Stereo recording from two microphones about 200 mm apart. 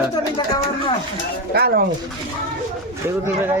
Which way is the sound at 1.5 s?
50° right (ahead or behind).